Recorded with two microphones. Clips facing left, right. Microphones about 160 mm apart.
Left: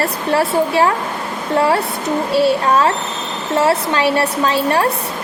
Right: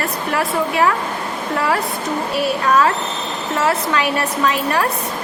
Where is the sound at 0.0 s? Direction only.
30° left (ahead or behind).